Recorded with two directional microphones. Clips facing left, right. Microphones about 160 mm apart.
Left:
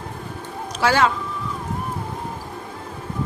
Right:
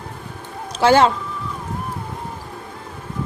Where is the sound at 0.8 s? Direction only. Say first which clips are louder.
Right 5 dB; 25° right (ahead or behind).